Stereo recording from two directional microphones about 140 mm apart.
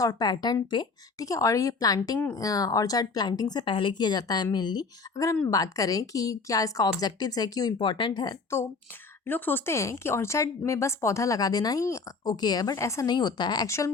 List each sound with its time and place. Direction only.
0.0 s speech: 25° left (ahead or behind)
9.2 s speech: 15° left (ahead or behind)